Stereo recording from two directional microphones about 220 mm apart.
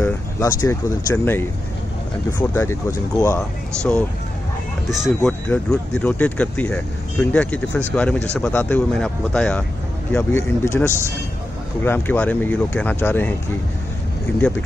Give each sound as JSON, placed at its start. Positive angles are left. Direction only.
{"t": 0.0, "sound": "speech", "side_deg": 15}
{"t": 10.9, "sound": "speech", "side_deg": -10}
{"t": 11.8, "sound": "speech", "side_deg": 10}